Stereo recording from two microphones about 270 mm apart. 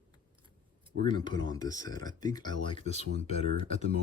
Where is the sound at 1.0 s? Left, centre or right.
Centre.